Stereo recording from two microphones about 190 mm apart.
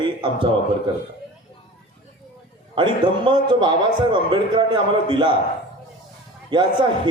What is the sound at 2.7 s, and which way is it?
A man's voice, 25° right (ahead or behind).